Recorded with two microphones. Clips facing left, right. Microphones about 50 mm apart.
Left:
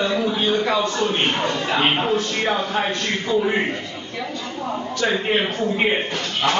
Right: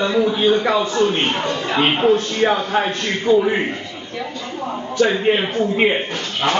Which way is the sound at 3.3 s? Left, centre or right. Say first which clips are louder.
Right 7 dB; right.